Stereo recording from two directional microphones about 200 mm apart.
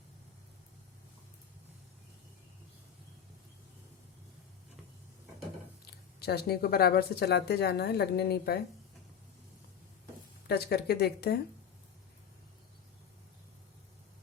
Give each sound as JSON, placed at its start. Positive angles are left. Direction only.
{"t": 5.8, "sound": "speech", "side_deg": 55}
{"t": 10.4, "sound": "speech", "side_deg": 55}